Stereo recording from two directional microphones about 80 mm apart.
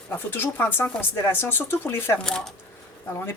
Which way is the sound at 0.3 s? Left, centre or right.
Left.